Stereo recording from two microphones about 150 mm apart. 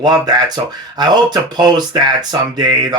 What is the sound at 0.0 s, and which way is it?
Speech, 25° right (ahead or behind).